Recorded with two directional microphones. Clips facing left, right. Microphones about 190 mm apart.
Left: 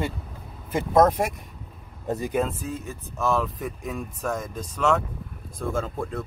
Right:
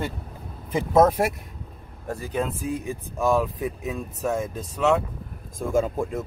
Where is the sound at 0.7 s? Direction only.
5° right (ahead or behind).